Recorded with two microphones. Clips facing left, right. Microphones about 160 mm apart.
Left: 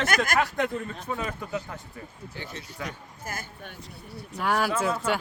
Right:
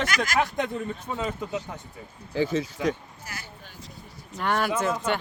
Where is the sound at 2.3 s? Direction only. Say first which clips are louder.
Right 17 dB; 90° right.